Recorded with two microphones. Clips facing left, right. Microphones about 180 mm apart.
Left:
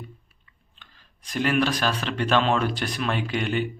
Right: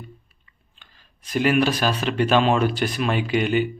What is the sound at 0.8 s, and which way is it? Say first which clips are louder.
Speech: left 1 dB; 5° right (ahead or behind).